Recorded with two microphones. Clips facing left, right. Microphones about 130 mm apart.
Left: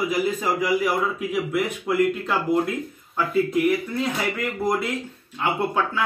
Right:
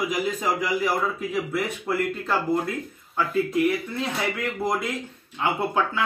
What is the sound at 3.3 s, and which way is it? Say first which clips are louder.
Speech: left 2 dB; centre (ahead or behind).